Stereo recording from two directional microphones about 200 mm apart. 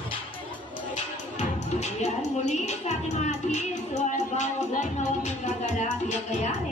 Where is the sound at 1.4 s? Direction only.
35° left (ahead or behind).